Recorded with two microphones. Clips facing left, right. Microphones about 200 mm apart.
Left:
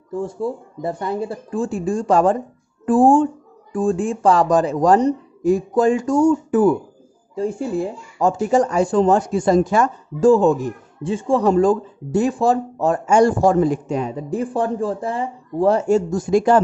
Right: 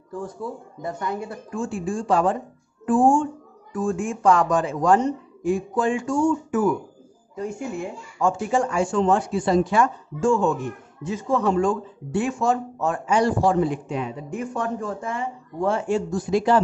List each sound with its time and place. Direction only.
0.1 s speech: 25° left (ahead or behind); by 16.6 s 50° left (ahead or behind)